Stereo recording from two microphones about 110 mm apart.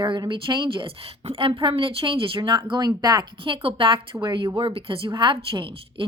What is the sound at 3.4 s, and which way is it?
Speech, 50° right (ahead or behind).